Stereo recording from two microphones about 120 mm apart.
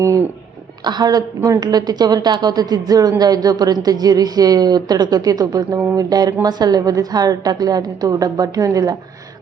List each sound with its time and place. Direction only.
0.9 s a woman's voice: 35° right (ahead or behind)